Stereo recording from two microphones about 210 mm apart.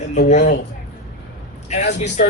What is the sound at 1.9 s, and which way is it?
Speech, 35° left (ahead or behind).